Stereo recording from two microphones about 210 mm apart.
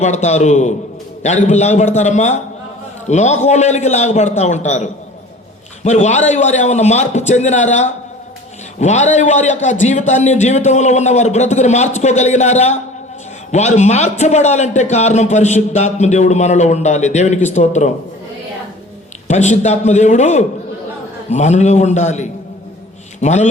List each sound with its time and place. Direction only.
0.0 s a man's voice: 35° left (ahead or behind)
19.3 s a man's voice: 35° left (ahead or behind)